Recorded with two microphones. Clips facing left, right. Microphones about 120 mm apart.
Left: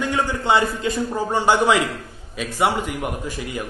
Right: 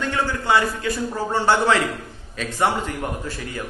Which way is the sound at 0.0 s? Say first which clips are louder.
Left 2 dB; 15° left (ahead or behind).